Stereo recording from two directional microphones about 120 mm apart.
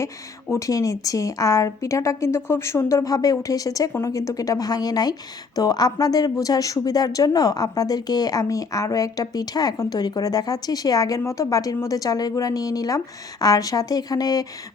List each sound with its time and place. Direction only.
0.5 s a woman's voice: 30° left (ahead or behind)